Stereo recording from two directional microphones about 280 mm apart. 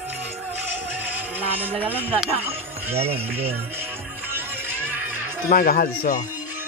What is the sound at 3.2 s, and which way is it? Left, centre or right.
Music, centre.